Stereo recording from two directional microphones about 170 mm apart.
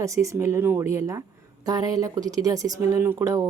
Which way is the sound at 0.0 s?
20° right (ahead or behind).